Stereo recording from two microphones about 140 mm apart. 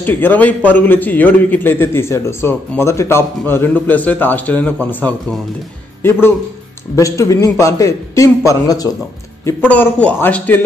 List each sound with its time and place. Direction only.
0.0 s a man's voice: 15° left (ahead or behind)
7.0 s a man's voice: 25° left (ahead or behind)
9.7 s a man's voice: 10° left (ahead or behind)